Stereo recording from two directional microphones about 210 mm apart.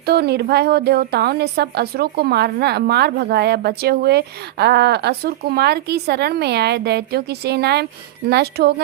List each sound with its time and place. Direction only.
0.0 s a woman's voice: 50° right (ahead or behind)